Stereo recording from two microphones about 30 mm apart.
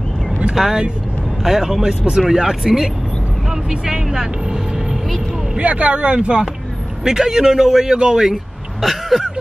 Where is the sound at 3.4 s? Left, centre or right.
Centre.